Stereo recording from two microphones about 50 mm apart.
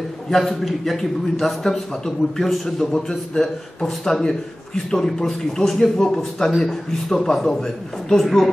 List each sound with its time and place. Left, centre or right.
0.3 s a man's voice: centre